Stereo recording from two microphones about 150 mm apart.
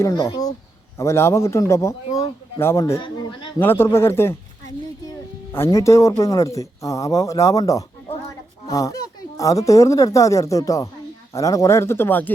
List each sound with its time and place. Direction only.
0.0 s a man's voice: 25° left (ahead or behind)
3.0 s speech: 30° left (ahead or behind)
3.6 s speech: 15° left (ahead or behind)
5.5 s a man's voice: 15° left (ahead or behind)